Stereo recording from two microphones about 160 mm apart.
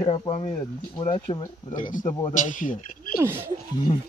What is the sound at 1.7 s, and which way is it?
A man's voice, 55° left (ahead or behind).